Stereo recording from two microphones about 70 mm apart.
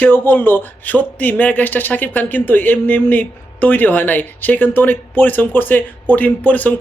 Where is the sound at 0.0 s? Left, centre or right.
Left.